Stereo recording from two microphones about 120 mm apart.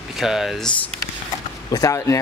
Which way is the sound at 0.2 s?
Centre (ahead or behind).